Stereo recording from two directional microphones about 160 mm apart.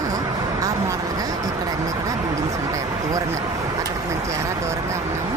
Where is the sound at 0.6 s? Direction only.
20° right (ahead or behind).